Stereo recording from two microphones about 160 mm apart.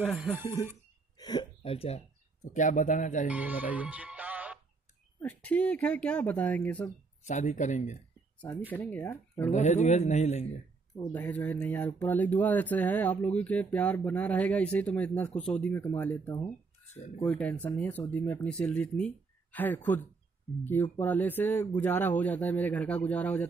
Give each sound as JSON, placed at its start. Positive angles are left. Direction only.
{"t": 0.0, "sound": "speech", "side_deg": 0}
{"t": 1.1, "sound": "hiccup", "side_deg": 25}
{"t": 1.6, "sound": "speech", "side_deg": 40}
{"t": 2.4, "sound": "speech", "side_deg": 50}
{"t": 3.3, "sound": "music", "side_deg": -10}
{"t": 5.4, "sound": "speech", "side_deg": 10}
{"t": 7.2, "sound": "speech", "side_deg": 50}
{"t": 8.4, "sound": "speech", "side_deg": 10}
{"t": 9.5, "sound": "speech", "side_deg": 45}
{"t": 11.0, "sound": "speech", "side_deg": 10}
{"t": 16.3, "sound": "speech", "side_deg": 20}
{"t": 16.8, "sound": "speech", "side_deg": 45}
{"t": 17.3, "sound": "speech", "side_deg": 10}